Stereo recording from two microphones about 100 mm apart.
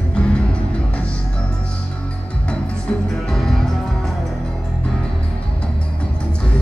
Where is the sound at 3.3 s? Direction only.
Centre (ahead or behind).